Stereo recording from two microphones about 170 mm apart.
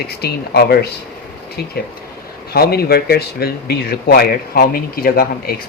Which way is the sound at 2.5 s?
65° left (ahead or behind).